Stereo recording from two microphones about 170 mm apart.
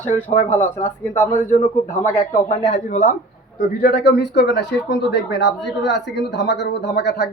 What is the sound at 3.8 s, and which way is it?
Speech, 80° left.